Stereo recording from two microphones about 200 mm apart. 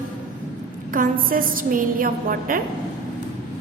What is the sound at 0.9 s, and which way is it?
A woman's voice, 45° right (ahead or behind).